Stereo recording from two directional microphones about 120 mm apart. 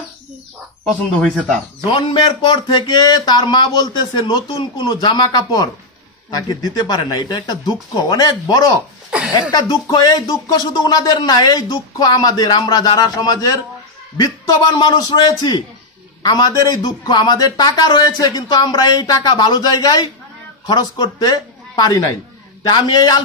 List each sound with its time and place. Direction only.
1.9 s speech: 45° left (ahead or behind)